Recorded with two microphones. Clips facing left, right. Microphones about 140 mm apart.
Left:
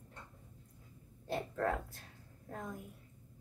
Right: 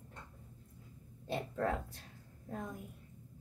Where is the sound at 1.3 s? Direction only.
15° right (ahead or behind).